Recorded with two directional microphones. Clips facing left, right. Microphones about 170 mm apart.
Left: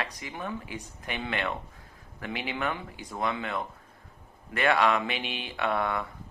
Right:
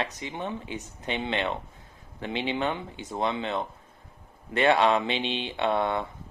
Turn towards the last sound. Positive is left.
turn(degrees=-25)  # may be behind; listen again after turning